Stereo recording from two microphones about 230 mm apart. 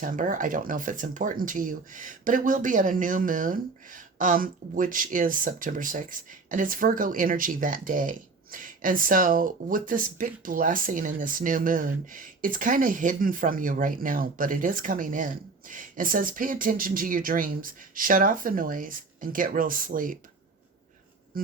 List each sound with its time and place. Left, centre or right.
0.0 s speech: right
21.3 s speech: right